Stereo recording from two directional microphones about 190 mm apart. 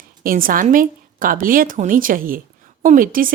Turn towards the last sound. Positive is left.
turn(degrees=-45)  # may be behind; listen again after turning